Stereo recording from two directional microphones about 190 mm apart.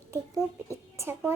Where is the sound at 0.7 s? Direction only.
15° right (ahead or behind).